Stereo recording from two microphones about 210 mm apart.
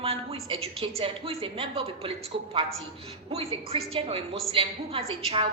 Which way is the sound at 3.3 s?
30° right (ahead or behind).